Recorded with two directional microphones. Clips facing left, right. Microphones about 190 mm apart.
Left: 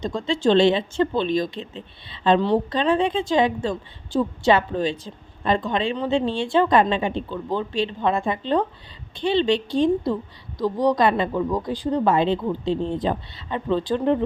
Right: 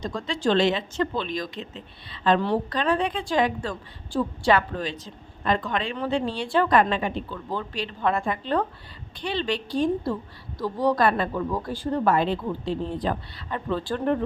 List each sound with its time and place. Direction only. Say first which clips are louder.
0.0 s a woman's voice: left 5 dB; 25° left (ahead or behind)